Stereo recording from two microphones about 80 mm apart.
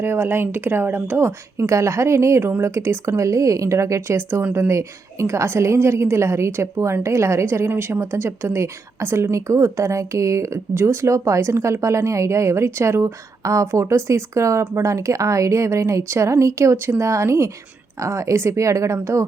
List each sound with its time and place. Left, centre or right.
0.0 s a woman's voice: right